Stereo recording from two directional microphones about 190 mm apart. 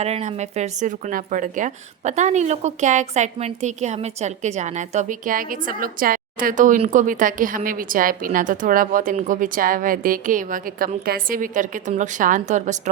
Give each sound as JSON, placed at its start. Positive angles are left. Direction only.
{"t": 0.0, "sound": "speech", "side_deg": -35}